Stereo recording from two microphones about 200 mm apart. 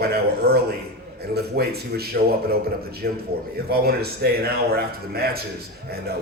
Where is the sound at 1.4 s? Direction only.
50° right (ahead or behind).